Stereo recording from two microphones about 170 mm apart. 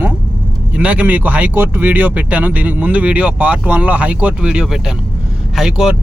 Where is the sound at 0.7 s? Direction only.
10° right (ahead or behind).